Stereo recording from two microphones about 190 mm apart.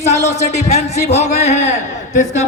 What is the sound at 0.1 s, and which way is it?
Speech, 35° left (ahead or behind).